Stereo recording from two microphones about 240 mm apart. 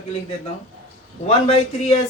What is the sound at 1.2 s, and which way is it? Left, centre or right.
Speech, left.